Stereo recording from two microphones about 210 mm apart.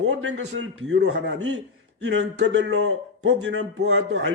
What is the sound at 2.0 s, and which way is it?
A man's voice, 60° right (ahead or behind).